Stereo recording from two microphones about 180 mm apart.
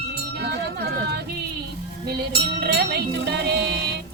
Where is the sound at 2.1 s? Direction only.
65° right (ahead or behind).